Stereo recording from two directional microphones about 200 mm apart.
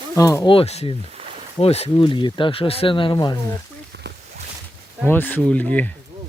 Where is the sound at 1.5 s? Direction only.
30° left (ahead or behind).